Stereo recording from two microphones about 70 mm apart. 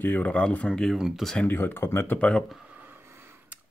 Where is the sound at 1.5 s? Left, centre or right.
Left.